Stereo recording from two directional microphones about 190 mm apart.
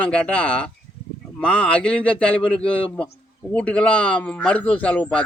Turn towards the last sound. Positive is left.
turn(degrees=5)  # may be behind; listen again after turning